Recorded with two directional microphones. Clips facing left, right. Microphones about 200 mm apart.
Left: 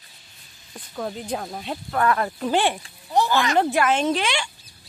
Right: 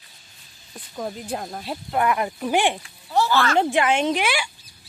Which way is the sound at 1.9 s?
15° right (ahead or behind).